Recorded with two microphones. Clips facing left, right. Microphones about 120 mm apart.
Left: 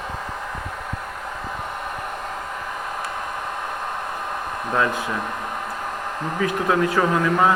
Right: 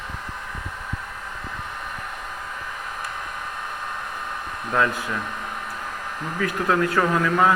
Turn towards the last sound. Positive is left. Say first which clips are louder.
# left 1 dB
turn(degrees=20)  # may be behind; listen again after turning